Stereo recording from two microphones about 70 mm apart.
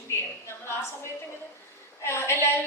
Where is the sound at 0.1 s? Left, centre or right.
Left.